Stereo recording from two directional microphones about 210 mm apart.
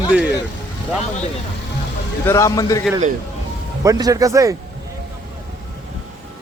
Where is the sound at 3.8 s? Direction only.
15° right (ahead or behind).